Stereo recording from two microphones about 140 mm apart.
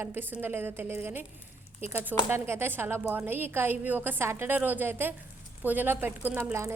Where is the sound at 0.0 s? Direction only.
15° right (ahead or behind).